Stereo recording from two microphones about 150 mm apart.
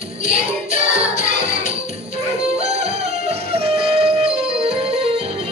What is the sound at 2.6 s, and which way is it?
Music, 45° right (ahead or behind).